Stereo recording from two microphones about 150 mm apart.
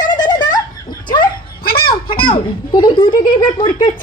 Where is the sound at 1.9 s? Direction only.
35° left (ahead or behind).